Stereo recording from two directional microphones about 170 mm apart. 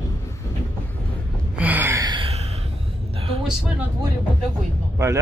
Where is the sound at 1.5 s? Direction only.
10° right (ahead or behind); by 2.4 s 30° right (ahead or behind).